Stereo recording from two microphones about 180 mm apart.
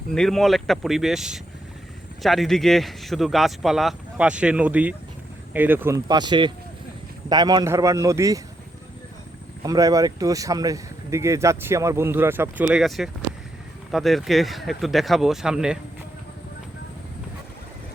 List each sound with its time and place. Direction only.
0.1 s a man's voice: centre (ahead or behind)
6.1 s a man's voice: 25° right (ahead or behind)
9.6 s a man's voice: 20° right (ahead or behind); by 15.8 s 5° right (ahead or behind)